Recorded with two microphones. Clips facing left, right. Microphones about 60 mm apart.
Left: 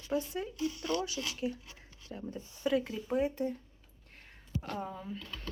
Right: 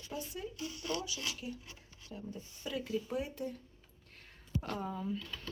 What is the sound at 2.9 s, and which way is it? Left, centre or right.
Speech, left.